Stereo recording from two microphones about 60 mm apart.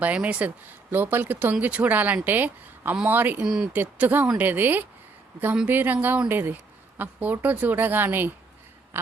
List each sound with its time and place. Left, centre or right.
0.0 s a woman's voice: right
3.4 s speech: centre
3.7 s a woman's voice: right